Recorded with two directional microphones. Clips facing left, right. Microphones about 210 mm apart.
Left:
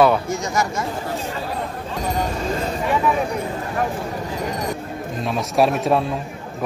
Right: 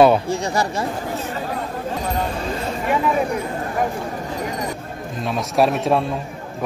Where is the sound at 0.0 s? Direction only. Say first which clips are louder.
Right 2 dB; 30° right (ahead or behind).